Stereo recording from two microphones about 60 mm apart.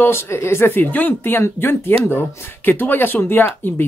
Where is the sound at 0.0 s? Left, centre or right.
Left.